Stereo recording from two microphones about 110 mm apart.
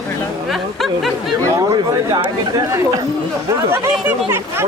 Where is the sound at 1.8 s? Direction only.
45° right (ahead or behind).